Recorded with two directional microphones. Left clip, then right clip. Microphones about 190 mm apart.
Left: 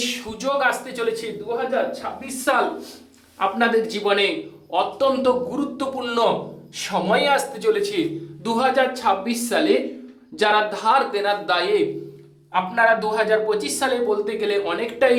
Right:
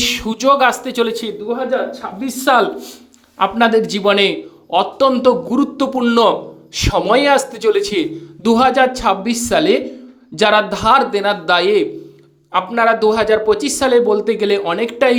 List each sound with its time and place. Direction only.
0.0 s speech: 40° right (ahead or behind); by 2.6 s 55° right (ahead or behind)
3.3 s speech: 45° right (ahead or behind)